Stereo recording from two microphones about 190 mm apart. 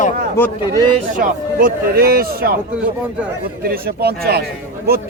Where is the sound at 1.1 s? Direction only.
45° right (ahead or behind).